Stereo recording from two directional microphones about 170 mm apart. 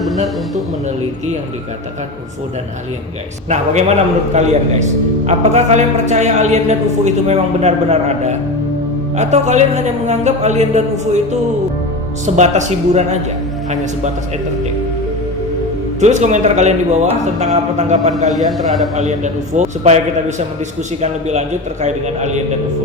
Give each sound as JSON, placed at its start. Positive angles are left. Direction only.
{"t": 3.5, "sound": "a man's voice", "side_deg": -45}
{"t": 12.2, "sound": "a man's voice", "side_deg": -45}
{"t": 16.0, "sound": "a man's voice", "side_deg": -45}